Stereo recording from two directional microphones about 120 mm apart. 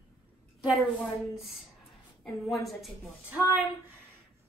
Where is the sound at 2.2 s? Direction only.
Centre (ahead or behind).